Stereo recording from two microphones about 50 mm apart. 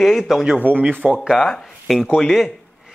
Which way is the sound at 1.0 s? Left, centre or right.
Centre.